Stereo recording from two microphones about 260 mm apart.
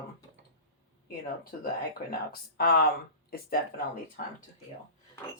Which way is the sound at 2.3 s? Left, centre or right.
Left.